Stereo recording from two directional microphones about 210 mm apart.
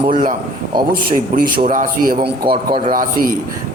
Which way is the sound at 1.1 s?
40° right (ahead or behind).